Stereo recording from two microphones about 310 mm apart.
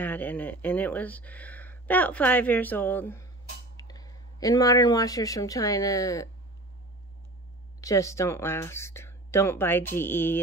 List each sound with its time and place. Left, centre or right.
0.0 s speech: centre
7.8 s speech: centre